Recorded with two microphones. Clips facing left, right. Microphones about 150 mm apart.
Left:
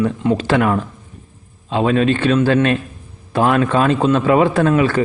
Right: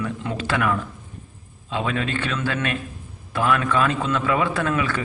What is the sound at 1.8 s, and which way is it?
A man's voice, 25° left (ahead or behind).